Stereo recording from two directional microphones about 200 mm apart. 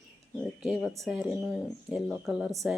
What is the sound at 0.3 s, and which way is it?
Bird, centre (ahead or behind).